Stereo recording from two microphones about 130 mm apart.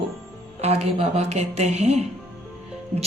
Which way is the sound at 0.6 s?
55° right (ahead or behind).